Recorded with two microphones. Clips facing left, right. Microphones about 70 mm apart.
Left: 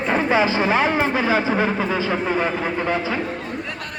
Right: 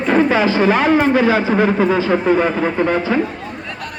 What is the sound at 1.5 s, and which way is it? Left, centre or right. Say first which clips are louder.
Speech: right 6 dB; centre.